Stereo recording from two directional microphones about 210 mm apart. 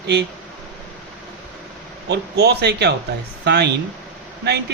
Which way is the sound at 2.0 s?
50° right (ahead or behind).